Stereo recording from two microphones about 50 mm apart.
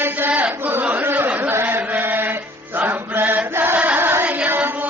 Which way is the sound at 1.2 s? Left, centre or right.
Right.